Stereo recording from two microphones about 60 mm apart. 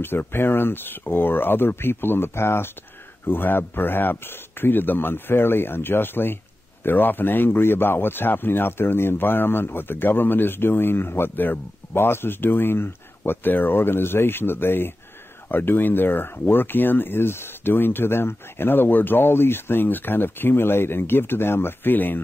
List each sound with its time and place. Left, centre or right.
0.0 s a man's voice: left